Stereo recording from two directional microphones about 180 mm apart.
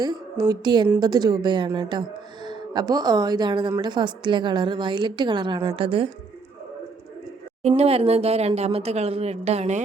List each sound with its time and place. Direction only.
0.0 s speech: 20° right (ahead or behind)
7.8 s speech: 35° right (ahead or behind)